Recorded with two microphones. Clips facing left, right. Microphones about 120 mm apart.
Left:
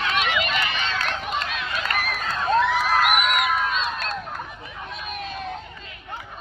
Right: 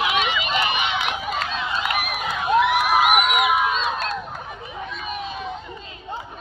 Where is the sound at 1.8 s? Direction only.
10° right (ahead or behind).